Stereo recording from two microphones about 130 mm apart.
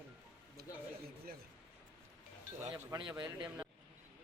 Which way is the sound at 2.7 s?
30° right (ahead or behind).